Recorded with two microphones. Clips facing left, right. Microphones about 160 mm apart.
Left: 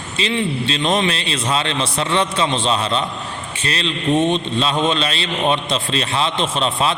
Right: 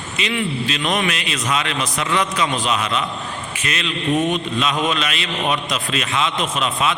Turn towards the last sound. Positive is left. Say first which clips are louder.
# left 2 dB
turn(degrees=30)  # may be behind; listen again after turning